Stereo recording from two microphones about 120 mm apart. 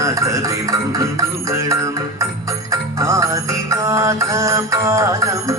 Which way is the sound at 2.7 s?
25° right (ahead or behind).